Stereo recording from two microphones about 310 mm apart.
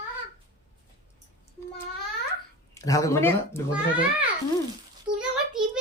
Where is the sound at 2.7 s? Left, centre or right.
Centre.